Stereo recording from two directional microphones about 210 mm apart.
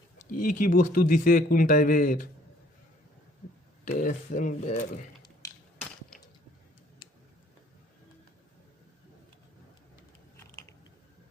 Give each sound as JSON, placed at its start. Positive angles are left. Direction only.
{"t": 0.3, "sound": "speech", "side_deg": 40}
{"t": 3.8, "sound": "speech", "side_deg": 40}
{"t": 5.4, "sound": "a sound", "side_deg": 15}
{"t": 10.3, "sound": "biting", "side_deg": 10}